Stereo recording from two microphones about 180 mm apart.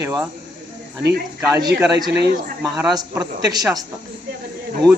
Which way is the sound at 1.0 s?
65° right (ahead or behind).